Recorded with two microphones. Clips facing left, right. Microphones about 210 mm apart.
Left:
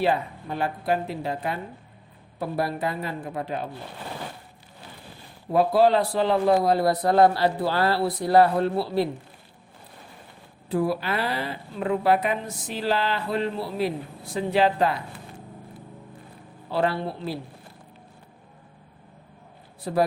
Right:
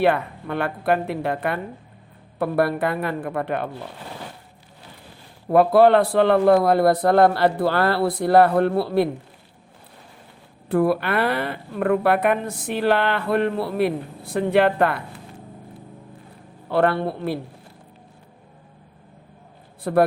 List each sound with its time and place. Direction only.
0.0 s speech: 60° right (ahead or behind)
5.5 s speech: 60° right (ahead or behind)
10.7 s speech: 60° right (ahead or behind)
16.6 s speech: 60° right (ahead or behind)
19.8 s speech: 60° right (ahead or behind)